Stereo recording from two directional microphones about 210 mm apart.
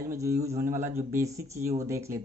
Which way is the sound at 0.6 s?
10° right (ahead or behind).